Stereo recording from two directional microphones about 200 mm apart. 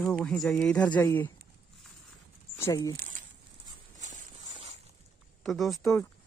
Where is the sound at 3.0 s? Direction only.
40° right (ahead or behind).